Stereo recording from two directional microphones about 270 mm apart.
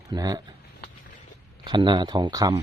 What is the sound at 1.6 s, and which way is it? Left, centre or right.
Speech, centre.